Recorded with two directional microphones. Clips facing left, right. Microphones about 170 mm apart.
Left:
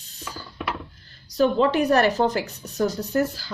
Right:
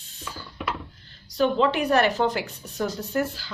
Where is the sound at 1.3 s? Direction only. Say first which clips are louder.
Left 2 dB; 40° left (ahead or behind).